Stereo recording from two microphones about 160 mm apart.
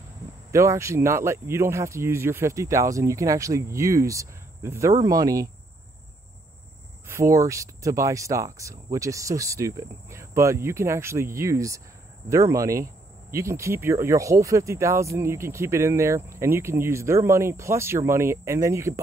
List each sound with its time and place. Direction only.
0.5 s speech: 20° right (ahead or behind)
7.1 s speech: 20° right (ahead or behind)